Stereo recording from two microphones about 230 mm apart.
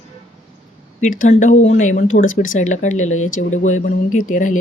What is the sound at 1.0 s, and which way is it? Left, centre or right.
Speech, left.